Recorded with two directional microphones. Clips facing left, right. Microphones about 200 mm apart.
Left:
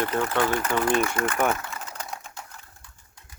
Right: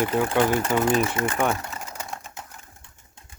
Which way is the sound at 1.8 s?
5° right (ahead or behind).